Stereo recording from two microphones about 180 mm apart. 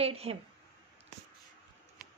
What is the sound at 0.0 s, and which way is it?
Speech, 35° right (ahead or behind).